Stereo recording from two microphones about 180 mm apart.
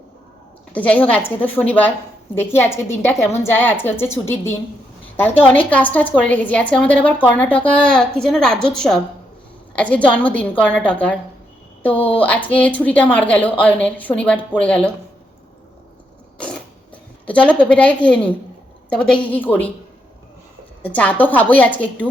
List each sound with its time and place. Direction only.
0.7 s a woman's voice: 10° left (ahead or behind)
11.9 s speech: 30° left (ahead or behind)
12.2 s a woman's voice: 10° left (ahead or behind)
16.4 s zipper: 5° left (ahead or behind)
18.9 s a woman's voice: 5° left (ahead or behind)
20.8 s a woman's voice: 10° left (ahead or behind)